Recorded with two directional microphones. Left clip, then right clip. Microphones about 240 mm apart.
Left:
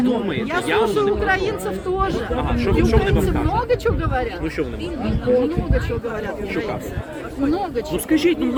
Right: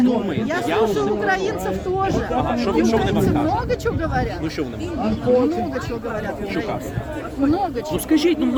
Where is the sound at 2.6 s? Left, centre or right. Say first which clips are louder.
Left 3 dB; right.